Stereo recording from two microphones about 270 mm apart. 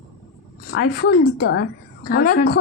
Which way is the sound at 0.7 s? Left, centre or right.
Left.